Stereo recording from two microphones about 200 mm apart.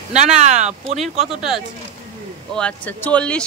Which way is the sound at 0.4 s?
35° right (ahead or behind).